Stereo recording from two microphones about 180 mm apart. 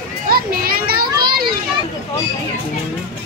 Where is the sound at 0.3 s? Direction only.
55° right (ahead or behind).